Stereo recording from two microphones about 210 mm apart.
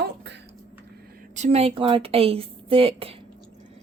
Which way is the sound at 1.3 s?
30° right (ahead or behind).